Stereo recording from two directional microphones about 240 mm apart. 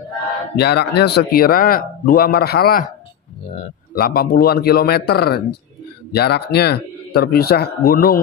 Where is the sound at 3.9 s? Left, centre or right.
Left.